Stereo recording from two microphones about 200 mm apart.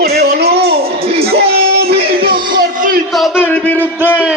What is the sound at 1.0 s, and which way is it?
Music, 30° right (ahead or behind).